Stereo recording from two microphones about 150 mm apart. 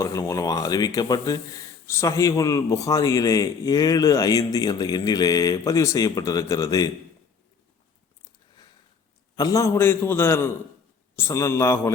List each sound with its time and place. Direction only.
0.0 s a man's voice: 20° left (ahead or behind)
9.3 s a man's voice: 25° left (ahead or behind)